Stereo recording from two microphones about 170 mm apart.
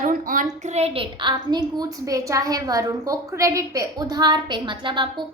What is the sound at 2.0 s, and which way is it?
A woman's voice, 20° right (ahead or behind).